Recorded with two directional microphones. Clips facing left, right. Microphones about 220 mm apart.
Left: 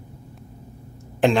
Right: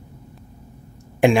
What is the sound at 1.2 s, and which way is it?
Speech, 10° right (ahead or behind).